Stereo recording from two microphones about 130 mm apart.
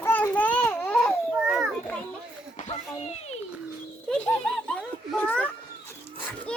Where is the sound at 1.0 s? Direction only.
Centre (ahead or behind).